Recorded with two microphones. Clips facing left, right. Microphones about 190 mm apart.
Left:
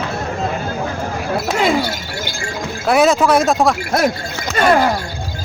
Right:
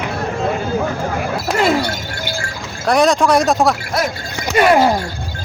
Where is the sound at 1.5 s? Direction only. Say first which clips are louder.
Right 2 dB; centre (ahead or behind).